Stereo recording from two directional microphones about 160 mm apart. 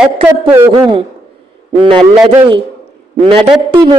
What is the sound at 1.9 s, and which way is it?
Speech, 35° right (ahead or behind).